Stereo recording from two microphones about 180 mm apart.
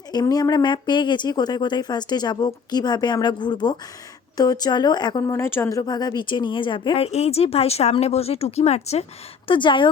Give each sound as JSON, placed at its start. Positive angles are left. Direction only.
{"t": 0.1, "sound": "a woman's voice", "side_deg": 20}